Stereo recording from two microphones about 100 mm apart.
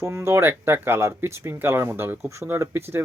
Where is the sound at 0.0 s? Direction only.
25° right (ahead or behind).